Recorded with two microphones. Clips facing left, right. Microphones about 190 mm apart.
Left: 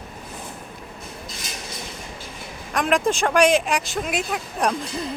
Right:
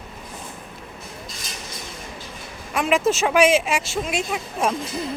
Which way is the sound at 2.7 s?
5° right (ahead or behind).